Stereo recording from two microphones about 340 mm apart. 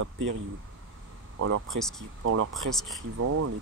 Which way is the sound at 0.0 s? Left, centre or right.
Right.